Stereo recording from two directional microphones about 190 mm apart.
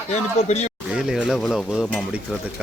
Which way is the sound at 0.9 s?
5° right (ahead or behind).